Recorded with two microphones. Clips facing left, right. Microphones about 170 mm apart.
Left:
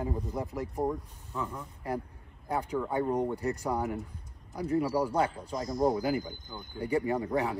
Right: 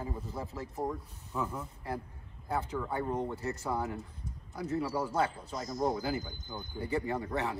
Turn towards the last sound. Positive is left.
turn(degrees=10)  # may be behind; listen again after turning